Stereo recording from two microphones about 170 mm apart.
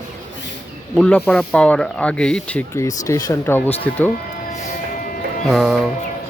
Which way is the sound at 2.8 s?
20° left (ahead or behind).